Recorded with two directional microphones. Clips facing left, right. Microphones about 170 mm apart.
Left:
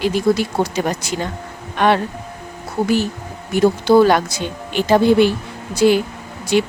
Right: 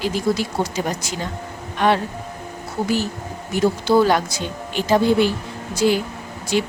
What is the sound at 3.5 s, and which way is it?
A woman's voice, 60° left (ahead or behind).